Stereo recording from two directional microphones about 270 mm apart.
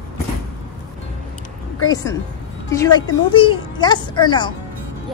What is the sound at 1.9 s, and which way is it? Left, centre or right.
A woman's voice, centre.